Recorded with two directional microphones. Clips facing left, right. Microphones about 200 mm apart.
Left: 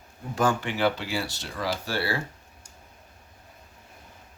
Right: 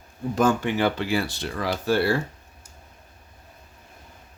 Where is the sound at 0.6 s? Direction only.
50° right (ahead or behind).